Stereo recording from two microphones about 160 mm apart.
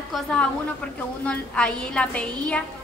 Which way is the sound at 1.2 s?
5° left (ahead or behind).